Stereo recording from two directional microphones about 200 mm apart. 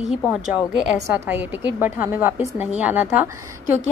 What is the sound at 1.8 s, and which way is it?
A woman's voice, 10° right (ahead or behind).